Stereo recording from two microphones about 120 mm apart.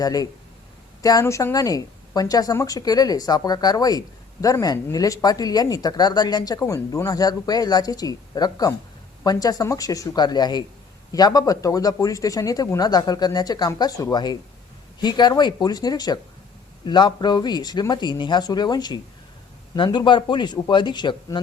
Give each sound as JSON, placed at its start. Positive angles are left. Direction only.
{"t": 0.0, "sound": "speech", "side_deg": 30}